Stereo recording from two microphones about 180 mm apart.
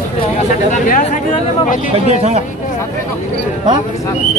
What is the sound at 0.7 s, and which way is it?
Speech, 40° left (ahead or behind).